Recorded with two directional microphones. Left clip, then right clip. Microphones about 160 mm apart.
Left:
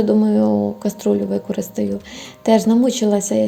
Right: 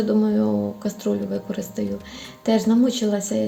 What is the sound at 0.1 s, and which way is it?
Speech, 35° left (ahead or behind).